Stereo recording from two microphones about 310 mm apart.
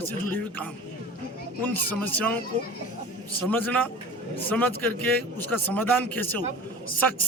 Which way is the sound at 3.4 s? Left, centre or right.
Centre.